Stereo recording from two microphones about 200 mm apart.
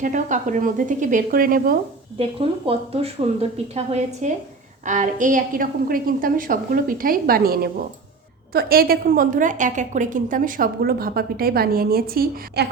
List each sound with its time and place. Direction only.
0.0 s a woman's voice: 40° right (ahead or behind)
2.1 s a woman's voice: 30° right (ahead or behind); by 12.6 s 50° right (ahead or behind)